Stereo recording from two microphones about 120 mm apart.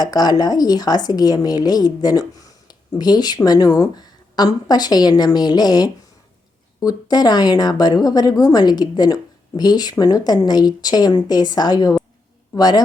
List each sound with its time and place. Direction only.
0.0 s speech: 35° left (ahead or behind)